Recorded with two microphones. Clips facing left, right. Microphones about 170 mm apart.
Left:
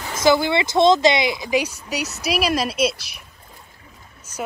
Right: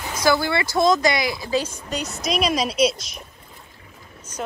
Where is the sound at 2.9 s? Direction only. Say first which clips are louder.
Right 5 dB; 65° left (ahead or behind).